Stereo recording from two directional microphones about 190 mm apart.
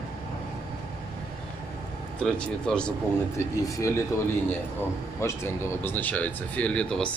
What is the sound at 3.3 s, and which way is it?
Speech, 15° left (ahead or behind).